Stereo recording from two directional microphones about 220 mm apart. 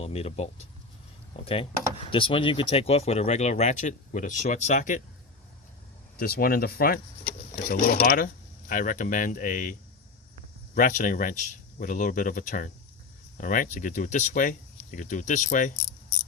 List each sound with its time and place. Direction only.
0.0 s speech: 25° left (ahead or behind)
2.0 s speech: 25° left (ahead or behind)
6.1 s speech: 40° left (ahead or behind)
10.8 s speech: 35° left (ahead or behind)